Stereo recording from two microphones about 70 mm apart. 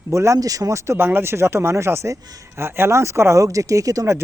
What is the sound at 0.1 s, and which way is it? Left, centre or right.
Speech, right.